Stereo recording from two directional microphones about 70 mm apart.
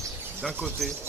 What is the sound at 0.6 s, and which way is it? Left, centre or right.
Speech, centre.